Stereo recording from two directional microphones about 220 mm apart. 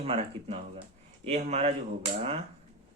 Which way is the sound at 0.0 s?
30° right (ahead or behind).